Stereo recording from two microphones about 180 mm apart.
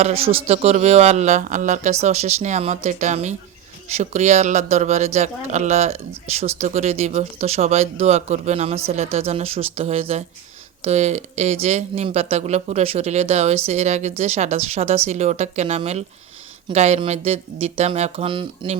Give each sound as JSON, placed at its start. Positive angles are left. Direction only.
{"t": 0.0, "sound": "speech", "side_deg": -35}